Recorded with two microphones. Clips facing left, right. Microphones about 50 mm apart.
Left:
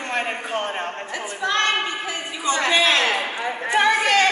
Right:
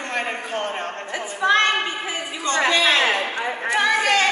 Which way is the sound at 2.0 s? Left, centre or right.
Centre.